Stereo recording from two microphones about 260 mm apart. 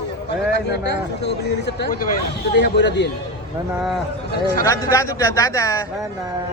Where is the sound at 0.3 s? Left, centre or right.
Left.